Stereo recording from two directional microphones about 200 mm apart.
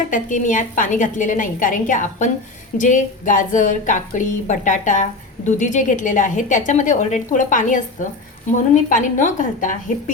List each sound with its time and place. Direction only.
0.1 s a woman's voice: 40° left (ahead or behind)